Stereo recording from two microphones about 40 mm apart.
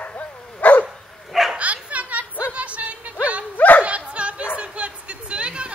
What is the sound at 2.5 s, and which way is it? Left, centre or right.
Music, right.